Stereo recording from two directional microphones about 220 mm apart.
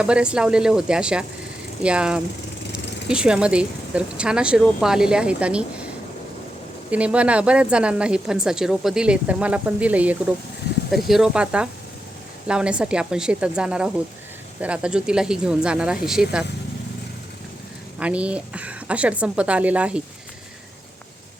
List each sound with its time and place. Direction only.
0.0 s a woman's voice: 5° right (ahead or behind)
6.9 s a woman's voice: 5° right (ahead or behind)
18.0 s a woman's voice: 5° right (ahead or behind)